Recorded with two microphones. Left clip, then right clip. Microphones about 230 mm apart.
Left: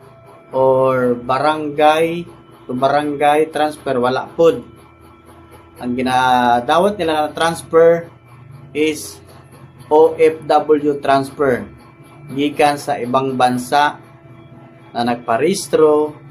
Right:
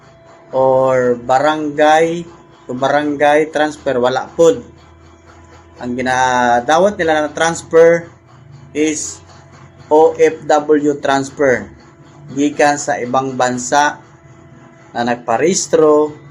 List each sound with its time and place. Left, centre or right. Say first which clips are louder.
0.5 s speech: right 2 dB; centre
5.8 s speech: right 1 dB; centre
9.9 s speech: right 1 dB; centre
14.9 s speech: right 1 dB; centre